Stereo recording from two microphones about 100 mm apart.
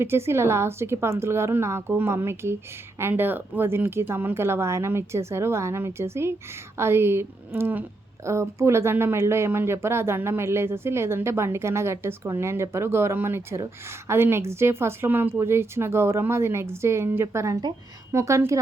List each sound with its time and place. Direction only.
0.0 s speech: 25° right (ahead or behind)